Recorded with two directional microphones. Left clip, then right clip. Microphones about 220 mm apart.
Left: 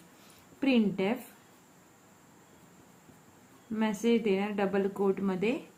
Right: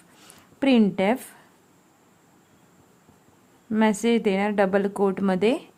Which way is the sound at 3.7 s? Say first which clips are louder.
Right 7 dB; 50° right (ahead or behind).